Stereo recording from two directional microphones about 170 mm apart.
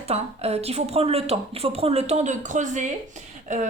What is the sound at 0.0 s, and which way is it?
Speech, 40° right (ahead or behind).